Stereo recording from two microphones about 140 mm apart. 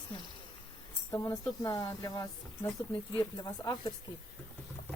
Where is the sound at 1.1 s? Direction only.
25° left (ahead or behind).